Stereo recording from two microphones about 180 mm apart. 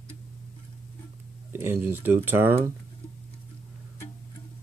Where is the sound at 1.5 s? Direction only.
10° right (ahead or behind).